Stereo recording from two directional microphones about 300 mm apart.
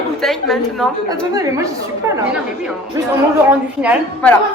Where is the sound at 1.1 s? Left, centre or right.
Centre.